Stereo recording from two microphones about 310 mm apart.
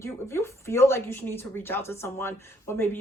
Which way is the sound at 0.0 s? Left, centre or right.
Centre.